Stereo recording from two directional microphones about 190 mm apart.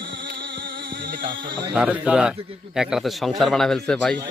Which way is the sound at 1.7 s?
5° right (ahead or behind).